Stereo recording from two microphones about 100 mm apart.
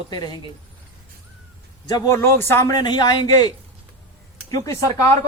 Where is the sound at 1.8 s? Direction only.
40° left (ahead or behind).